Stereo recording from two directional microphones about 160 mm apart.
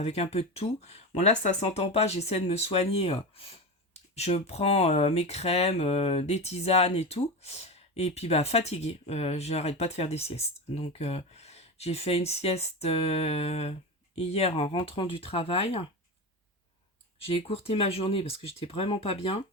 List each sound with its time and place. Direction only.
0.0 s speech: 40° left (ahead or behind)
17.2 s speech: 35° left (ahead or behind)